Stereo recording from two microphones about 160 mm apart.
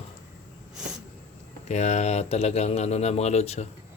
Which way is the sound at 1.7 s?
45° left (ahead or behind).